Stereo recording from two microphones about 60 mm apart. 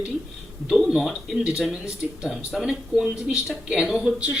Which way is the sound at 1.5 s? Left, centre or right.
Centre.